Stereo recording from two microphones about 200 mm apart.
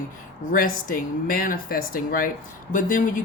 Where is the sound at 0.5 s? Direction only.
45° left (ahead or behind).